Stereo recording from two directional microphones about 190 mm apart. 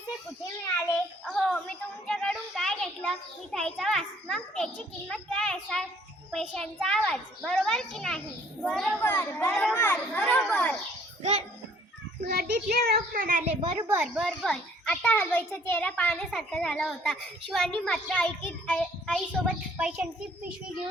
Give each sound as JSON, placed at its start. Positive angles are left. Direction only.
{"t": 1.2, "sound": "a sound", "side_deg": 5}
{"t": 6.3, "sound": "a child's voice", "side_deg": 0}
{"t": 9.5, "sound": "a child's voice", "side_deg": 0}
{"t": 11.2, "sound": "a child's voice", "side_deg": -30}
{"t": 12.3, "sound": "a child's voice", "side_deg": -55}
{"t": 14.0, "sound": "a child's voice", "side_deg": 0}